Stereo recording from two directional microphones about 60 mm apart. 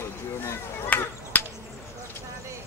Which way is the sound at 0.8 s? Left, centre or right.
Left.